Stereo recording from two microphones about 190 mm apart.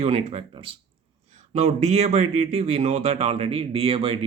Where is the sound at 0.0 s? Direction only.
30° right (ahead or behind).